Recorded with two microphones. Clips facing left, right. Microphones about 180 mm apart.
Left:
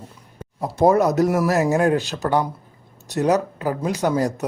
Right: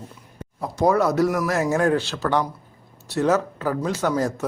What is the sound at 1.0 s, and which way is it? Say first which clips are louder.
Speech: left 2 dB; 20° left (ahead or behind).